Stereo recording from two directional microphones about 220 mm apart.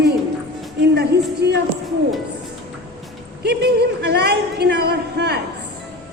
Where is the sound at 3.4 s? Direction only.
50° right (ahead or behind).